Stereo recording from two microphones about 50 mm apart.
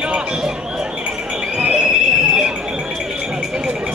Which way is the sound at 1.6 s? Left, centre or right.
Centre.